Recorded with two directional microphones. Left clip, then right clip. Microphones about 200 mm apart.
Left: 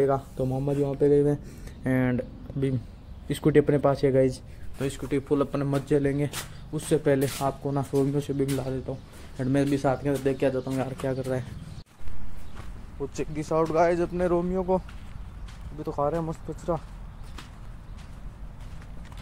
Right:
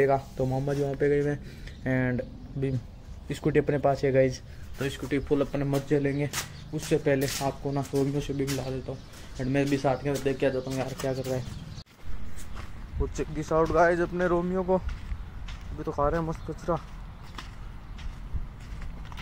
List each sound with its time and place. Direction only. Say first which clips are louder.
0.5 s speech: left 3 dB; 15° left (ahead or behind)
4.7 s speech: left 1 dB; 15° left (ahead or behind)
13.0 s speech: left 1 dB; 10° left (ahead or behind)
15.8 s speech: even; centre (ahead or behind)